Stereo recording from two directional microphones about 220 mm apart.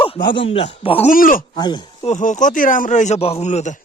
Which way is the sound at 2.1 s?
35° left (ahead or behind).